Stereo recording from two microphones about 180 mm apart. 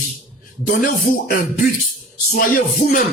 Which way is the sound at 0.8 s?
50° left (ahead or behind).